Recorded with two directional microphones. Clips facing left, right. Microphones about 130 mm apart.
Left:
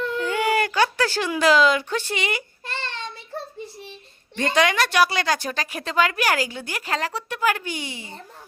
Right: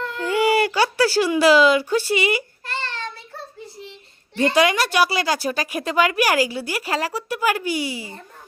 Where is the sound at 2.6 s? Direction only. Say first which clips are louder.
Right 2 dB; 20° left (ahead or behind).